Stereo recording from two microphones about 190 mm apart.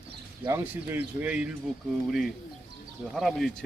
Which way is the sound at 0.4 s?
10° right (ahead or behind).